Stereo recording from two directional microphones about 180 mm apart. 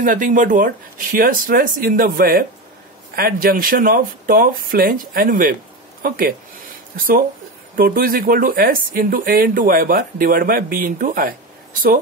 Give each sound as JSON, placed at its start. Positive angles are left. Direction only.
{"t": 0.0, "sound": "speech", "side_deg": -50}
{"t": 7.7, "sound": "speech", "side_deg": -55}